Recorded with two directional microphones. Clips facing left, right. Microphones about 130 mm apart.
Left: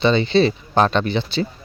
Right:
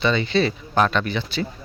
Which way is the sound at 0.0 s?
30° left (ahead or behind).